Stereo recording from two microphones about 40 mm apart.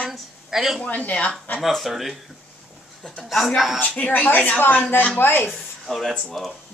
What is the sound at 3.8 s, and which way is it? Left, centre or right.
Speech, left.